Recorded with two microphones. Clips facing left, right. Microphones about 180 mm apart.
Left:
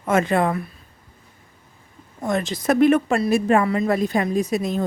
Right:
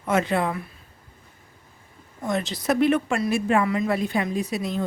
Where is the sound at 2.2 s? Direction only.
50° left (ahead or behind).